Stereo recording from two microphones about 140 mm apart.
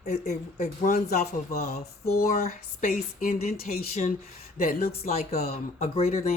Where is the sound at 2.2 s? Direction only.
90° left.